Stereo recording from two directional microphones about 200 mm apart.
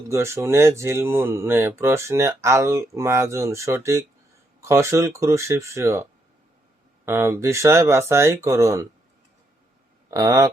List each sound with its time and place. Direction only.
0.1 s speech: 15° right (ahead or behind)
10.1 s speech: 15° right (ahead or behind)